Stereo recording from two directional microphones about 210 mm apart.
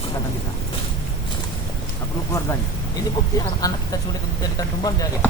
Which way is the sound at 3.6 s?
20° left (ahead or behind).